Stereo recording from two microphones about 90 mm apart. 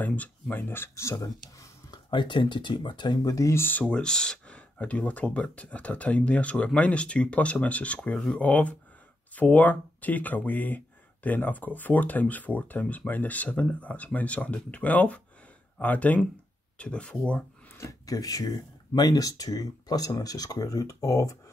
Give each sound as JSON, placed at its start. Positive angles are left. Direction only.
{"t": 0.0, "sound": "speech", "side_deg": 20}
{"t": 1.1, "sound": "speech", "side_deg": 40}
{"t": 1.9, "sound": "speech", "side_deg": 60}
{"t": 3.3, "sound": "speech", "side_deg": 35}
{"t": 3.8, "sound": "speech", "side_deg": 10}
{"t": 17.7, "sound": "speech", "side_deg": 35}